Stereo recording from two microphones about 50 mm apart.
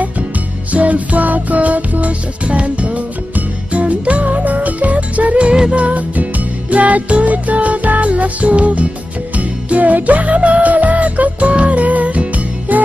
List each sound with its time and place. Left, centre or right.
0.7 s music: right